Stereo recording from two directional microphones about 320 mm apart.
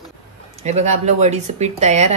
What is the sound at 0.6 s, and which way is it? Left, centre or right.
Speech, right.